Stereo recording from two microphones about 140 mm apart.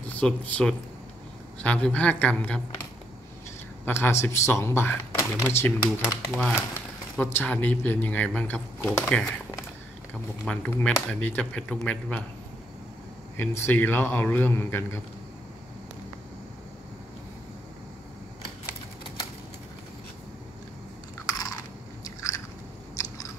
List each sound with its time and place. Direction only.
0.1 s speech: 10° left (ahead or behind)
3.8 s speech: 15° left (ahead or behind)
5.9 s speech: centre (ahead or behind)
7.2 s speech: 15° left (ahead or behind)
10.4 s speech: 10° left (ahead or behind)
13.4 s speech: 15° left (ahead or behind)
21.3 s biting: 25° left (ahead or behind)